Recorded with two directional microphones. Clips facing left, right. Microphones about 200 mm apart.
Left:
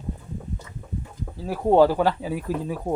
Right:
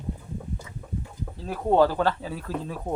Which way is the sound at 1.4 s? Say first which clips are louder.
Left 3 dB; 15° left (ahead or behind).